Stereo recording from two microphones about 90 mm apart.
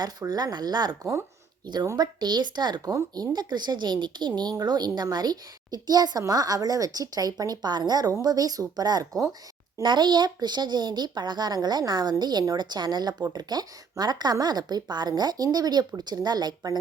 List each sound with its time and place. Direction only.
0.0 s speech: 45° right (ahead or behind)